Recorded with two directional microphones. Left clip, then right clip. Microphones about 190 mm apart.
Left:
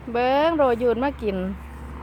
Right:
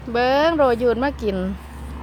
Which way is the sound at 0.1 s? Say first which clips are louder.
Right 2 dB; 10° left (ahead or behind).